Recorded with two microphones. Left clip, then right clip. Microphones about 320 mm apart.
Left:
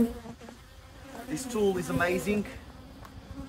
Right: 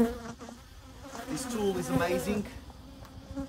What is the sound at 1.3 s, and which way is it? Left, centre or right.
Speech, centre.